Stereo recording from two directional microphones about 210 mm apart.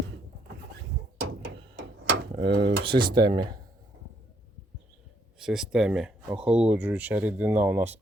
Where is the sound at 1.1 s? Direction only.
70° right (ahead or behind).